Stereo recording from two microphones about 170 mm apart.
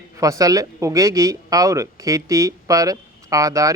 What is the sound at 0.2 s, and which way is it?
Speech, 20° right (ahead or behind).